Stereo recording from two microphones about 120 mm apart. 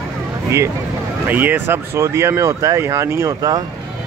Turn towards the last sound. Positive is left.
turn(degrees=-25)  # may be behind; listen again after turning